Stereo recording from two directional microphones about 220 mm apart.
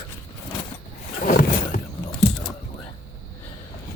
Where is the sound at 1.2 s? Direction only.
35° left (ahead or behind).